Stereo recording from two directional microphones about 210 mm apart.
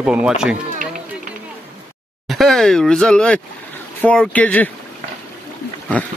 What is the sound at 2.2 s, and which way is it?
Speech, centre (ahead or behind).